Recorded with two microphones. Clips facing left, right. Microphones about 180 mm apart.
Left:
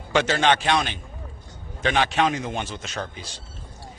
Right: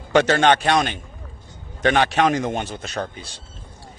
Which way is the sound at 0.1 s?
55° right (ahead or behind).